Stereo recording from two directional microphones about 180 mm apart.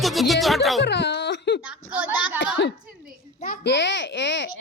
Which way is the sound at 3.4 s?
60° left (ahead or behind).